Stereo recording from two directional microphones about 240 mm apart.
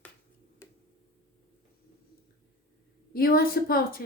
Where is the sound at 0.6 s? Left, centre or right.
Centre.